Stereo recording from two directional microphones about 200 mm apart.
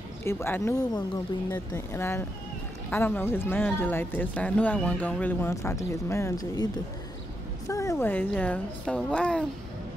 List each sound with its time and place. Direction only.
0.2 s speech: 10° left (ahead or behind)